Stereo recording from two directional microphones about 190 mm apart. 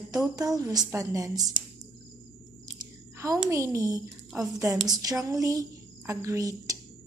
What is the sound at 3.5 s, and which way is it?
A woman's voice, 15° right (ahead or behind).